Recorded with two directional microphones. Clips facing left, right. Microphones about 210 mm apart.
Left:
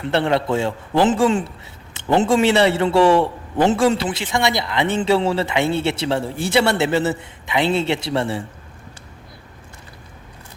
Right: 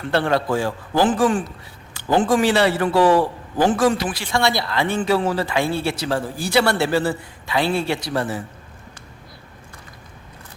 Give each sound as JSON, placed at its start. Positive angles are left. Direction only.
{"t": 0.0, "sound": "a man's voice", "side_deg": 20}